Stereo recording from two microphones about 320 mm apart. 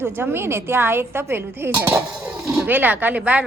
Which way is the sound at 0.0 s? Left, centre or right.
Centre.